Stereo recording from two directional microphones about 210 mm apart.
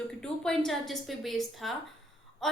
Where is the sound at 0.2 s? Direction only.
5° left (ahead or behind).